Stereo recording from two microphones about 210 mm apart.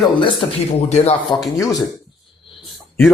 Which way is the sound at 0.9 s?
30° left (ahead or behind).